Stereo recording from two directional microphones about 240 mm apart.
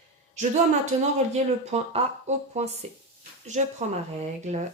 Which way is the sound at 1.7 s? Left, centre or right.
Right.